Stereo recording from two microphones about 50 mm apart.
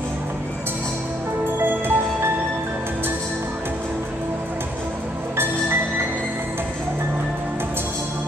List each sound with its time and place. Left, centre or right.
1.6 s music: right